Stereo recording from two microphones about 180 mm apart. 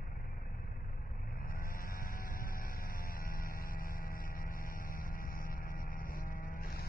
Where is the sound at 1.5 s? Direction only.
50° left (ahead or behind).